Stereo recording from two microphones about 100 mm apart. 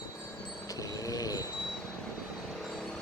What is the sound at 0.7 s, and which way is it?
Train, 35° left (ahead or behind).